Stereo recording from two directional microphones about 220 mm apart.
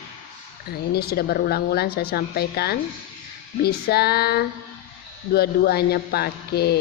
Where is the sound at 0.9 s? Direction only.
45° left (ahead or behind).